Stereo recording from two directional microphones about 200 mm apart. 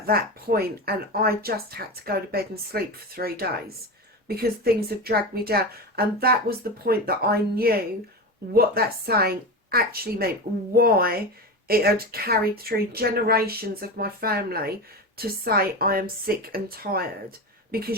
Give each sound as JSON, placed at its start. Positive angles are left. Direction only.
{"t": 0.0, "sound": "speech", "side_deg": -50}